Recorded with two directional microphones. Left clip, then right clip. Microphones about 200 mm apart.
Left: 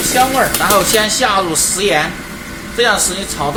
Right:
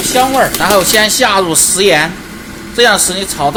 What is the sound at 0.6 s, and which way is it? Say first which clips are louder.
Speech: right 3 dB; 40° right (ahead or behind).